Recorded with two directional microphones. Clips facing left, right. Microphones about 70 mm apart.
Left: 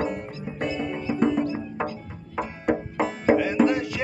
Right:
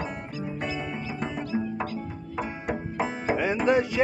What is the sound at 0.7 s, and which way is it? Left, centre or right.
Music, centre.